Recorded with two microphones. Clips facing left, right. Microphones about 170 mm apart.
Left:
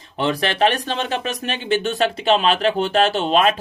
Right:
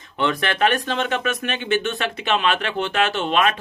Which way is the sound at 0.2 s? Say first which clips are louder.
Left 2 dB; 30° left (ahead or behind).